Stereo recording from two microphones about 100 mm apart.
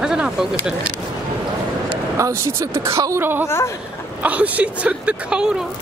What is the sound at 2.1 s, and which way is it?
A woman's voice, 30° right (ahead or behind).